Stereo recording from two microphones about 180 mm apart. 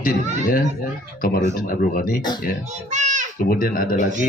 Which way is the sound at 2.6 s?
40° right (ahead or behind).